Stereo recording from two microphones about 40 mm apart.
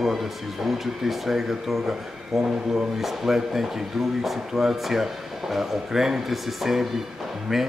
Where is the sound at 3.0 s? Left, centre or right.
Centre.